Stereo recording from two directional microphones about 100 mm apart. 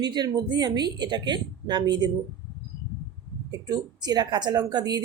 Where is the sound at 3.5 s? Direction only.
40° right (ahead or behind).